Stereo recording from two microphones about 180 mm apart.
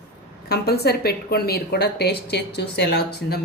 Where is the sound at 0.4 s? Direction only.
60° left (ahead or behind).